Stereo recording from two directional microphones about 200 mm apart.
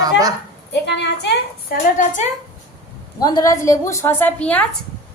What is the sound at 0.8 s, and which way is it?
Speech, 60° left (ahead or behind).